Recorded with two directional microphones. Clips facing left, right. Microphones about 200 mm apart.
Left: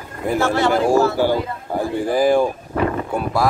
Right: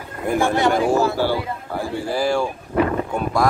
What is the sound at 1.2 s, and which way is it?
Speech, 15° left (ahead or behind).